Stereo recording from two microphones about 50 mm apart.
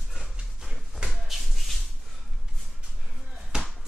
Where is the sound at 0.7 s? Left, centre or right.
Centre.